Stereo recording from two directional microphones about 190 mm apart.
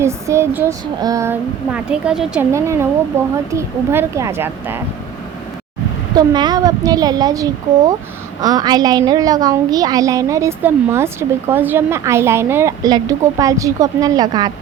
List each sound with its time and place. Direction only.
0.0 s a woman's voice: 15° right (ahead or behind)
6.1 s a woman's voice: 20° right (ahead or behind)